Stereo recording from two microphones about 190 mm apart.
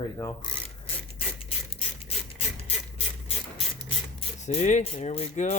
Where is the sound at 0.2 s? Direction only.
20° left (ahead or behind).